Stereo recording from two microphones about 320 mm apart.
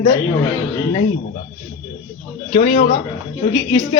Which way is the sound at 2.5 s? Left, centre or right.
Centre.